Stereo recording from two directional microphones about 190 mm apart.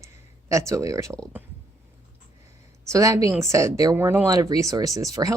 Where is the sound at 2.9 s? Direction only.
15° right (ahead or behind).